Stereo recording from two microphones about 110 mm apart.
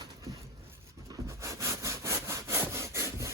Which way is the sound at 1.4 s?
25° right (ahead or behind).